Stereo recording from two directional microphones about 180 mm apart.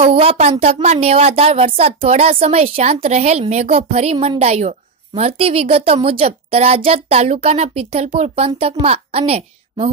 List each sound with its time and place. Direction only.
0.0 s a woman's voice: 30° right (ahead or behind)